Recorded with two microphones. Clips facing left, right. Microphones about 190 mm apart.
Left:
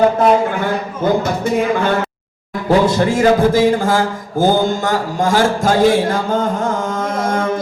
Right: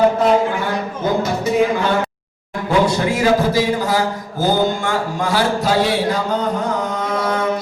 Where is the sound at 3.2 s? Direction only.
50° left (ahead or behind).